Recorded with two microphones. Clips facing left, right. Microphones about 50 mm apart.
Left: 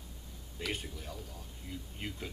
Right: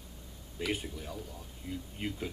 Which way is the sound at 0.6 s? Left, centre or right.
Centre.